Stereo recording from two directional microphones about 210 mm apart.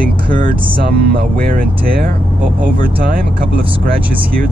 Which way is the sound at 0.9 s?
45° right (ahead or behind).